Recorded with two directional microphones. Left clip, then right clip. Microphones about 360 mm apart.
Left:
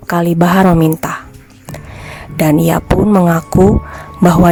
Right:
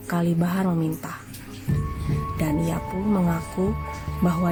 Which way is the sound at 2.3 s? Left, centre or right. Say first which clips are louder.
Left 17 dB; left.